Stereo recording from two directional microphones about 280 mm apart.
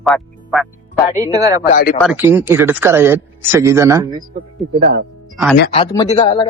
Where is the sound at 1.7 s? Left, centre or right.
Left.